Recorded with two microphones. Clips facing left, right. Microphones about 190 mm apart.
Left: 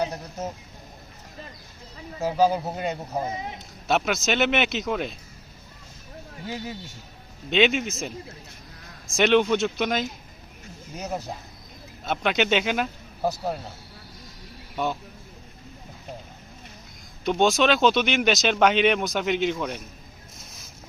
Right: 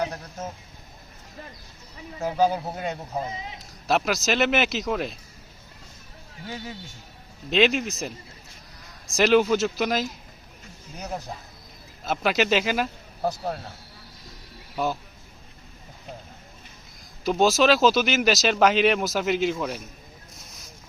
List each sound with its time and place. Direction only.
0.0 s a sound: 15° left (ahead or behind)
2.5 s speech: 15° left (ahead or behind)
3.3 s speech: 55° left (ahead or behind)
3.8 s speech: centre (ahead or behind)
7.5 s speech: centre (ahead or behind)
12.0 s speech: centre (ahead or behind)
14.8 s speech: centre (ahead or behind)
17.2 s speech: centre (ahead or behind)